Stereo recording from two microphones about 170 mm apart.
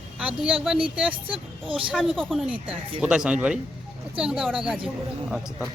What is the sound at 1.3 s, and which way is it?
Speech, 30° right (ahead or behind).